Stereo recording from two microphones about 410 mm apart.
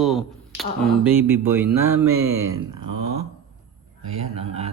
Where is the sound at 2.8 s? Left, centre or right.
Right.